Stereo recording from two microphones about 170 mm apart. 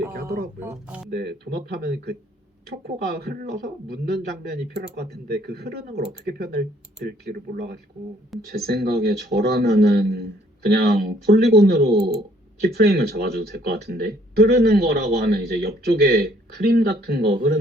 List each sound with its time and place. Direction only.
0.6 s speech: 10° right (ahead or behind)
1.1 s speech: 70° right (ahead or behind)